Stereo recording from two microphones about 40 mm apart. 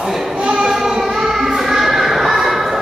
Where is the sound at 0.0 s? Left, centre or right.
Centre.